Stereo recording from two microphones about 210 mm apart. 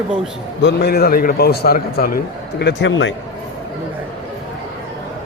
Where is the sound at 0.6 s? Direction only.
50° left (ahead or behind).